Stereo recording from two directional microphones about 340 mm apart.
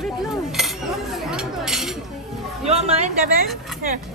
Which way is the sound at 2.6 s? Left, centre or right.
Centre.